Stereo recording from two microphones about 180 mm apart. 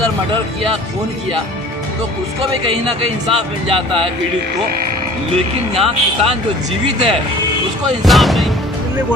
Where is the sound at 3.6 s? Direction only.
30° right (ahead or behind).